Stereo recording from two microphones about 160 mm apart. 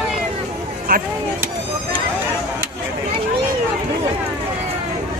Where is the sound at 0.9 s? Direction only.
60° right (ahead or behind).